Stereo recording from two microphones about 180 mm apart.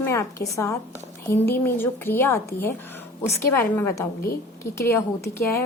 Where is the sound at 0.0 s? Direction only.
15° left (ahead or behind).